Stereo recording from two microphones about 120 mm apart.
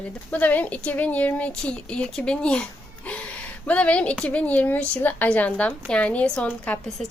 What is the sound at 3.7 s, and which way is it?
A woman's voice, 10° left (ahead or behind).